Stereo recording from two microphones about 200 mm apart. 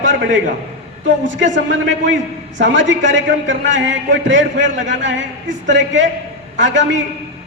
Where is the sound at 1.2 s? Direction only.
65° right (ahead or behind).